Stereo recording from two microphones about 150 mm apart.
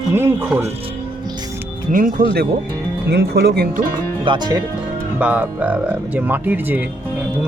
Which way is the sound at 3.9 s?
30° right (ahead or behind).